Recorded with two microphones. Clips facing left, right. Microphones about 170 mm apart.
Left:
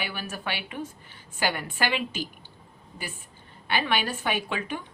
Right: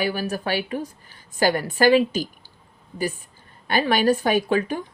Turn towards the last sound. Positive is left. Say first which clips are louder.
# right 10 dB
turn(degrees=-40)  # may be behind; listen again after turning